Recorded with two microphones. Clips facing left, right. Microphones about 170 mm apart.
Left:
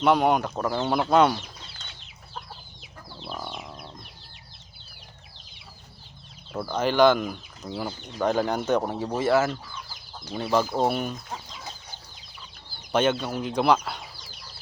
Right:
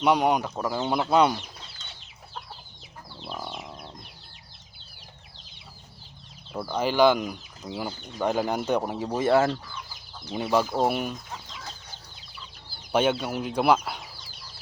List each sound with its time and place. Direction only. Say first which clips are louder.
0.0 s speech: left 1 dB; centre (ahead or behind)
0.6 s speech: left 1 dB; 10° right (ahead or behind)
1.1 s speech: left 1 dB; 5° left (ahead or behind)
3.3 s chicken: even; 5° right (ahead or behind)
6.5 s speech: left 1 dB; 10° right (ahead or behind)
9.2 s speech: right 1 dB; 30° right (ahead or behind)
10.3 s speech: even; 10° right (ahead or behind)
12.9 s speech: even; 10° right (ahead or behind)